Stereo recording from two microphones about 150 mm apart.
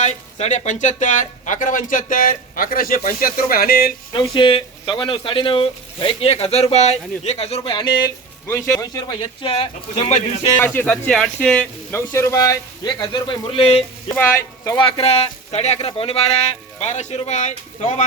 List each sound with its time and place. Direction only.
0.0 s speech: 50° left (ahead or behind); by 3.9 s 80° left
4.1 s speech: 30° left (ahead or behind)
8.4 s speech: 15° left (ahead or behind); by 10.5 s 45° left (ahead or behind)
10.8 s speech: 15° left (ahead or behind); by 13.8 s 40° left (ahead or behind)
14.1 s speech: 15° left (ahead or behind)
14.8 s speech: 35° left (ahead or behind); by 18.0 s 55° left (ahead or behind)